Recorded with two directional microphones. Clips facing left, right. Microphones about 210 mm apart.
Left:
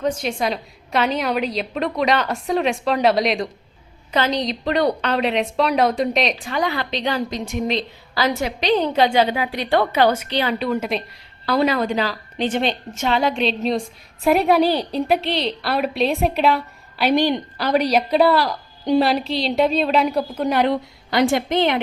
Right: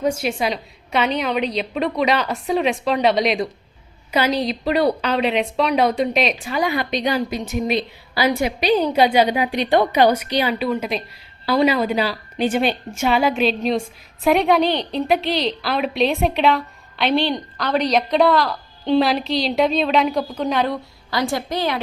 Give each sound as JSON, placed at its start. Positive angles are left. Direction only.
{"t": 0.0, "sound": "a woman's voice", "side_deg": -10}
{"t": 20.7, "sound": "a woman's voice", "side_deg": 25}